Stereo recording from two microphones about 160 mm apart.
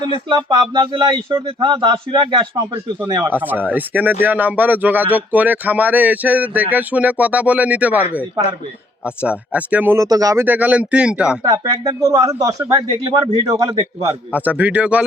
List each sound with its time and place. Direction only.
0.3 s speech: 30° right (ahead or behind)
3.3 s speech: 10° right (ahead or behind)
9.0 s speech: 5° right (ahead or behind)
10.4 s speech: 10° right (ahead or behind)
11.4 s speech: 25° right (ahead or behind)
14.3 s speech: 10° right (ahead or behind)